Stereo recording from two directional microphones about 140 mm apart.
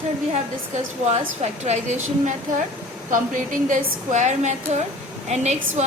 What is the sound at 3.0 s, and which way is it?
A woman's voice, 70° right (ahead or behind).